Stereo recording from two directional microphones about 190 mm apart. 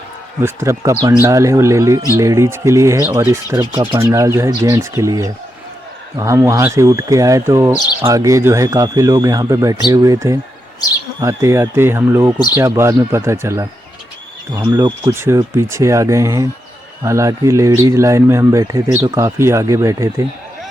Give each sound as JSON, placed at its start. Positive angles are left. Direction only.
{"t": 0.4, "sound": "speech", "side_deg": -15}
{"t": 14.7, "sound": "speech", "side_deg": -25}